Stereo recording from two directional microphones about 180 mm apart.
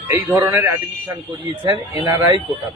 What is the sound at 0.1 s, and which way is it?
A man's voice, 10° right (ahead or behind).